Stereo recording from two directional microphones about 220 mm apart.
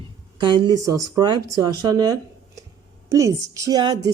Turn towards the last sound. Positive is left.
turn(degrees=-20)  # may be behind; listen again after turning